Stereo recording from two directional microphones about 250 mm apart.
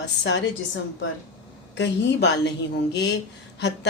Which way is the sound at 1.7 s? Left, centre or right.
Left.